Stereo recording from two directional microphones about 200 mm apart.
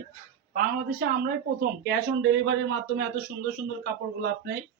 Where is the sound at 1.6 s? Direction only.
60° right (ahead or behind).